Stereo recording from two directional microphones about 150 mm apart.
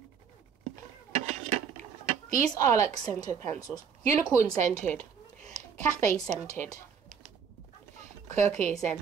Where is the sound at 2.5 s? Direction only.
25° left (ahead or behind).